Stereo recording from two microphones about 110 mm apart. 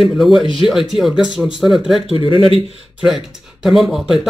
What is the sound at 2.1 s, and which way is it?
Speech, 50° left (ahead or behind).